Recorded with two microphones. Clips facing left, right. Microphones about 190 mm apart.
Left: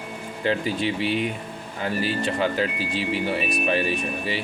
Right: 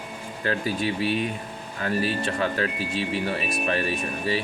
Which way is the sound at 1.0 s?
90° left.